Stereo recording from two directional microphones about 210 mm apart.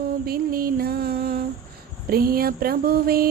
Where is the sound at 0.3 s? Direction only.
45° right (ahead or behind).